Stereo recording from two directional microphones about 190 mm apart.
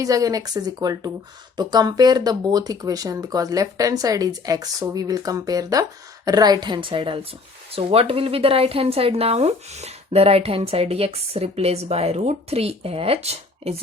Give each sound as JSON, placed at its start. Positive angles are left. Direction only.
{"t": 0.0, "sound": "speech", "side_deg": -20}